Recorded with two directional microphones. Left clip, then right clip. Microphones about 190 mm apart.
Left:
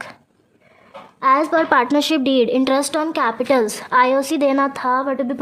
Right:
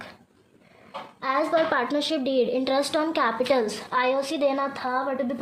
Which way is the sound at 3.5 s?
50° left (ahead or behind).